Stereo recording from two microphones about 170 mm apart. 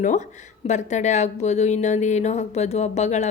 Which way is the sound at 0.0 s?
45° left (ahead or behind).